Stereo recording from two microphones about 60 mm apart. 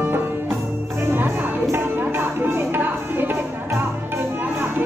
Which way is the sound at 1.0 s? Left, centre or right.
Right.